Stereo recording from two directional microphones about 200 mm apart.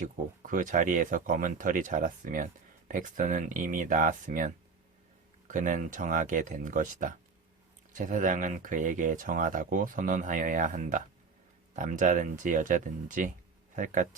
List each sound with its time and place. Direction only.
0.0 s speech: 40° right (ahead or behind)